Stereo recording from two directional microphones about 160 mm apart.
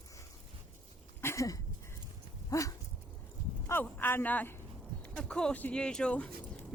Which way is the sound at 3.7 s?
10° left (ahead or behind).